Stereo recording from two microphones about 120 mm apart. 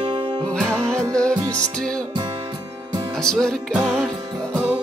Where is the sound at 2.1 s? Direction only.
40° right (ahead or behind).